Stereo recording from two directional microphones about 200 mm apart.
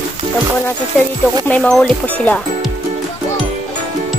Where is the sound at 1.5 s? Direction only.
5° left (ahead or behind).